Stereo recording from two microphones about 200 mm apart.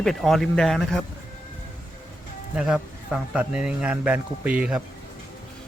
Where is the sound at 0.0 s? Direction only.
Centre (ahead or behind).